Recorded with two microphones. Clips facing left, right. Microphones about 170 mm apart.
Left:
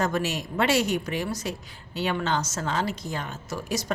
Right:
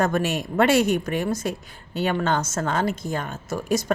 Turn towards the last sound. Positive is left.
turn(degrees=-50)  # may be behind; listen again after turning